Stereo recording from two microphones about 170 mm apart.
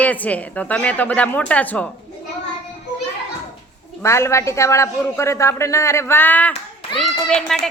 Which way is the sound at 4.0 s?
15° left (ahead or behind).